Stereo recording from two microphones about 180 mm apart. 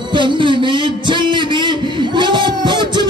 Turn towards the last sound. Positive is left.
turn(degrees=-25)  # may be behind; listen again after turning